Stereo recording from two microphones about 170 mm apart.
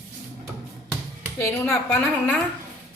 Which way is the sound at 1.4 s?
15° left (ahead or behind).